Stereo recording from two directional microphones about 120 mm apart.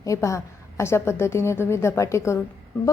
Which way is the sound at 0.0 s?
25° left (ahead or behind).